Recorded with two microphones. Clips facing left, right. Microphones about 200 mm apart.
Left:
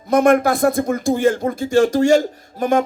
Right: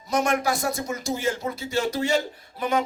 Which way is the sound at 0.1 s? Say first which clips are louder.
Left 10 dB; 55° left (ahead or behind).